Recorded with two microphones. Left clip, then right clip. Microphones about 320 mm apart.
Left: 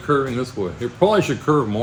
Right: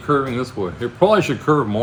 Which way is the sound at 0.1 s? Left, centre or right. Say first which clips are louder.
Right 1 dB; centre.